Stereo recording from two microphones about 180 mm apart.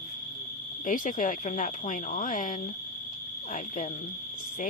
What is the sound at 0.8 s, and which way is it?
Speech, 45° left (ahead or behind).